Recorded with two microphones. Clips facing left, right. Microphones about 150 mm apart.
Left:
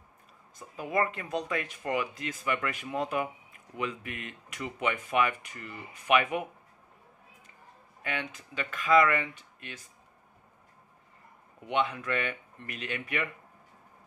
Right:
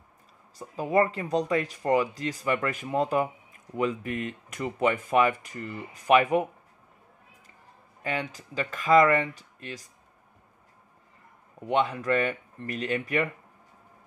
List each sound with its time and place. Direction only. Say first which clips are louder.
0.6 s speech: right 6 dB; 35° right (ahead or behind)
8.0 s speech: right 4 dB; 35° right (ahead or behind)
11.6 s speech: right 4 dB; 40° right (ahead or behind)